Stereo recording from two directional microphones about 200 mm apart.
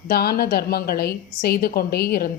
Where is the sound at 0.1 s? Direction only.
50° left (ahead or behind).